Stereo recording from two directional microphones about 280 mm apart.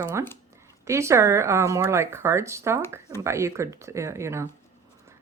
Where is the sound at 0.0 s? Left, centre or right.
Centre.